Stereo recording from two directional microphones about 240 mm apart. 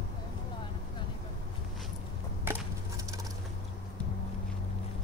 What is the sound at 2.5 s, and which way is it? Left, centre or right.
Wood, centre.